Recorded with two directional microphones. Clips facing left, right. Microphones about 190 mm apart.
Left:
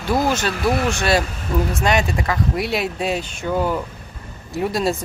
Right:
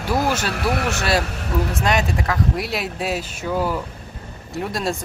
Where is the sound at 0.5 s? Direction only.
70° right (ahead or behind).